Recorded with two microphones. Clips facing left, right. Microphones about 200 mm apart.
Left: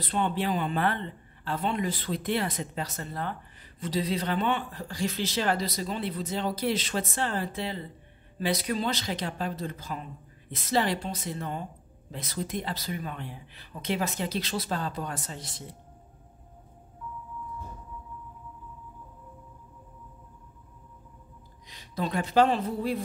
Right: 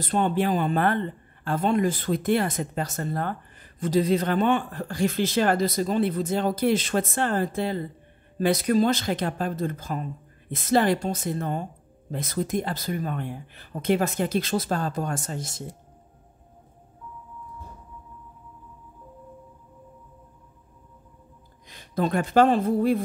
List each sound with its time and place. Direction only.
0.0 s speech: 45° right (ahead or behind)
21.6 s speech: 50° right (ahead or behind)